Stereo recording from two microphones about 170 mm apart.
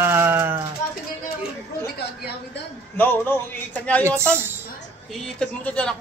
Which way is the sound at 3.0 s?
10° left (ahead or behind).